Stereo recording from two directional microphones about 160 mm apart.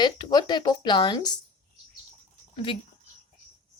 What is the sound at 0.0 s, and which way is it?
A woman's voice, 25° left (ahead or behind).